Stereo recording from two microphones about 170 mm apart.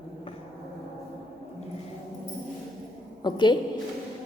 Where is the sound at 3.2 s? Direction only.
25° left (ahead or behind).